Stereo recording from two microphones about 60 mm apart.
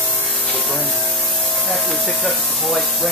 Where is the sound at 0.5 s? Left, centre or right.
Centre.